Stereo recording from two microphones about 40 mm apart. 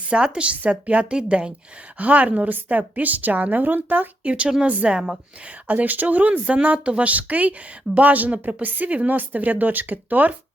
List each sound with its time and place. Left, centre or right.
0.1 s a woman's voice: right
2.0 s a woman's voice: right
4.2 s a woman's voice: right
5.6 s a woman's voice: right